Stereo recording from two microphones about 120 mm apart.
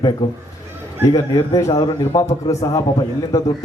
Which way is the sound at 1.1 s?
30° left (ahead or behind).